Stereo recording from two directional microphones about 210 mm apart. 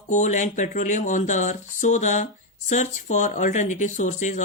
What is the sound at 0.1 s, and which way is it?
Speech, 35° left (ahead or behind).